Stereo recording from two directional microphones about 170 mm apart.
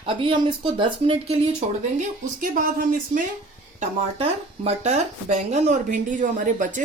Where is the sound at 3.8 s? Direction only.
40° right (ahead or behind).